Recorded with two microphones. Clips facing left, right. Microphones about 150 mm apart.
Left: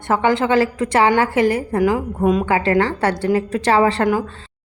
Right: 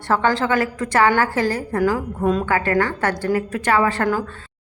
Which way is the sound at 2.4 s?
25° left (ahead or behind).